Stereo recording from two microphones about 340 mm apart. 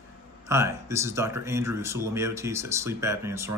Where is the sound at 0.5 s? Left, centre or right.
Centre.